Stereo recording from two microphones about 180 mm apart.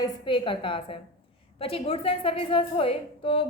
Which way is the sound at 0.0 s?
25° left (ahead or behind).